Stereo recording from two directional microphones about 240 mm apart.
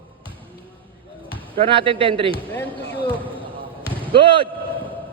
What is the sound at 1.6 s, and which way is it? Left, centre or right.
Speech, right.